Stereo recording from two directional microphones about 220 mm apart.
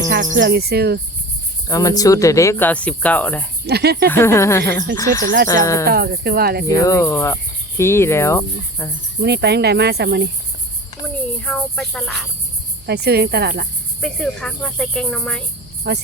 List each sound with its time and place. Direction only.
0.3 s cricket: 50° right (ahead or behind)
1.6 s speech: 15° left (ahead or behind)
3.7 s cricket: 45° right (ahead or behind)
4.1 s speech: 10° left (ahead or behind)
5.2 s speech: 40° right (ahead or behind)
5.8 s cricket: 45° right (ahead or behind)
6.7 s speech: 15° left (ahead or behind)
9.2 s cricket: 50° right (ahead or behind)
11.0 s cricket: 5° left (ahead or behind)
12.8 s cricket: 50° right (ahead or behind)
14.0 s cricket: 5° left (ahead or behind)
15.9 s cricket: 50° right (ahead or behind)